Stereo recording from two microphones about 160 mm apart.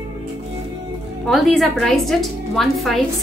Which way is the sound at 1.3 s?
Centre (ahead or behind).